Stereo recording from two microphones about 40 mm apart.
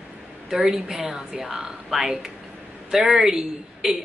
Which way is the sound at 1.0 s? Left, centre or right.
Centre.